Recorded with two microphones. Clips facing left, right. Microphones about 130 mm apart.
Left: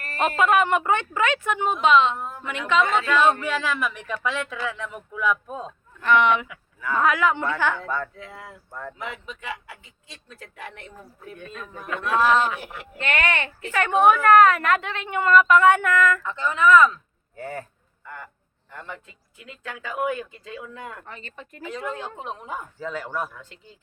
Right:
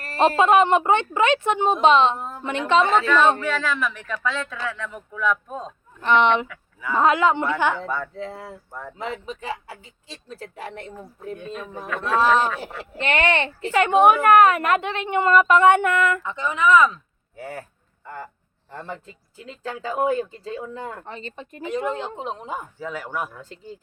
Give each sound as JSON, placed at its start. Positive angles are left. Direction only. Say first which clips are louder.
{"t": 0.0, "sound": "a woman's voice", "louder": "right 4 dB", "side_deg": -30}
{"t": 3.4, "sound": "speech", "louder": "right 1 dB", "side_deg": 10}
{"t": 6.0, "sound": "a woman's voice", "louder": "right 1 dB", "side_deg": -25}
{"t": 6.7, "sound": "speech", "louder": "right 2 dB", "side_deg": -10}
{"t": 7.0, "sound": "a woman's voice", "louder": "right 3 dB", "side_deg": -25}
{"t": 8.1, "sound": "a woman's voice", "louder": "right 7 dB", "side_deg": -30}
{"t": 17.3, "sound": "speech", "louder": "left 1 dB", "side_deg": -5}
{"t": 18.0, "sound": "speech", "louder": "right 4 dB", "side_deg": -30}
{"t": 22.8, "sound": "speech", "louder": "left 1 dB", "side_deg": -10}
{"t": 23.3, "sound": "speech", "louder": "right 6 dB", "side_deg": -40}